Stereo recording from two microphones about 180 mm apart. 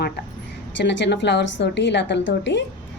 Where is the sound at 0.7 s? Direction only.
75° left (ahead or behind).